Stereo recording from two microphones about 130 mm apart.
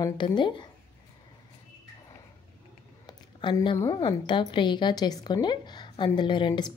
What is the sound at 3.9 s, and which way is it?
A woman's voice, 35° left (ahead or behind).